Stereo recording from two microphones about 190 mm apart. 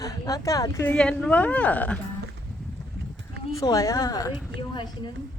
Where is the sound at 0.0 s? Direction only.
20° left (ahead or behind).